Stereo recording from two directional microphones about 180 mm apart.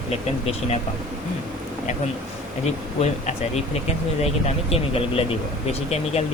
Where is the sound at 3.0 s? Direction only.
40° left (ahead or behind).